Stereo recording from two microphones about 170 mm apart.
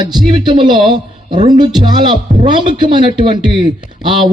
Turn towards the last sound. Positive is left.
turn(degrees=-30)  # may be behind; listen again after turning